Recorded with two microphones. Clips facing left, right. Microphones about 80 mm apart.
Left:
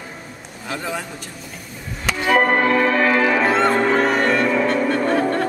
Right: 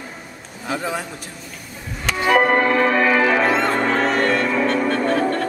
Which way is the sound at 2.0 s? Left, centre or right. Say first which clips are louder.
Right 1 dB; centre.